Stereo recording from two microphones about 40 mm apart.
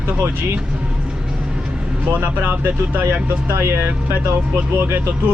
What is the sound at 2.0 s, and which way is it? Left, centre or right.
Speech, right.